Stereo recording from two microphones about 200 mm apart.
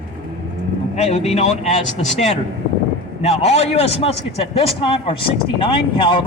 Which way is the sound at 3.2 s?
35° left (ahead or behind).